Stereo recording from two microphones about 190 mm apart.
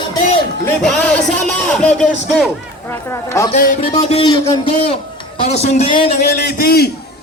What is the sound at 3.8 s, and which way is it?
Speech, 30° left (ahead or behind).